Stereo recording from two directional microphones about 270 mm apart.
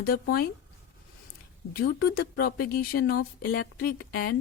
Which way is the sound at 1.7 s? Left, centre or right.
Left.